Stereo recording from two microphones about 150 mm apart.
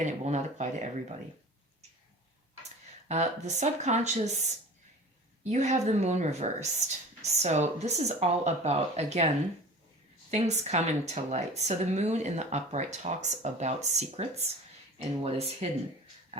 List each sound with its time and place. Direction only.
0.0 s speech: 50° right (ahead or behind)
2.6 s speech: 50° right (ahead or behind)
10.3 s speech: 45° right (ahead or behind)